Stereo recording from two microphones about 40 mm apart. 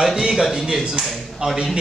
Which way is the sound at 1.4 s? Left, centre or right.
Right.